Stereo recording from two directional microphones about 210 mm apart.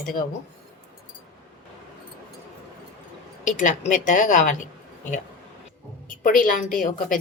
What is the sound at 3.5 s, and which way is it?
A woman's voice, 35° left (ahead or behind).